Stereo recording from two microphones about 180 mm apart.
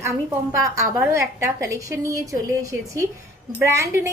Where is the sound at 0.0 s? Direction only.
15° right (ahead or behind).